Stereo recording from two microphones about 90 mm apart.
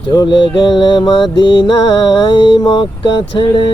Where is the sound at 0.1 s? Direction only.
55° left (ahead or behind).